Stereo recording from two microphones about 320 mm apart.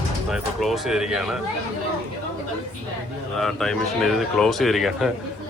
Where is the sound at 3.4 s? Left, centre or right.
Centre.